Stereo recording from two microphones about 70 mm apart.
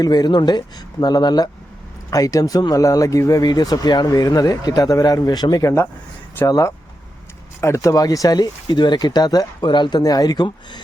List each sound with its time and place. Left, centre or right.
0.0 s speech: left
2.0 s speech: left
3.4 s speech: left
6.4 s speech: left
7.9 s speech: left